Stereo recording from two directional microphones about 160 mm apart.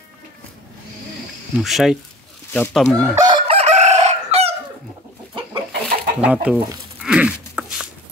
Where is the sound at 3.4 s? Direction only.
40° right (ahead or behind).